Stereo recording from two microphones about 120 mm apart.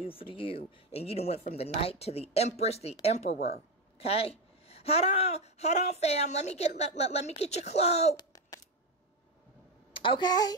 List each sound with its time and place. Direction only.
0.0 s a woman's voice: 50° left (ahead or behind); by 8.2 s 65° left (ahead or behind)
8.2 s a sound: 30° left (ahead or behind)
9.9 s speech: 45° left (ahead or behind)